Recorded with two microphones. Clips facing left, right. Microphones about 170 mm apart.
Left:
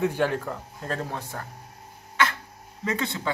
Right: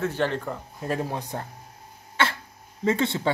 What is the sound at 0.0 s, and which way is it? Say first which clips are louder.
Speech: left 1 dB; 10° left (ahead or behind).